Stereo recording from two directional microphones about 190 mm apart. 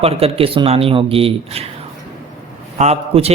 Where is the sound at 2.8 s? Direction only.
35° right (ahead or behind).